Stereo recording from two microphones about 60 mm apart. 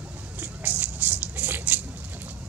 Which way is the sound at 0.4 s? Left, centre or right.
Right.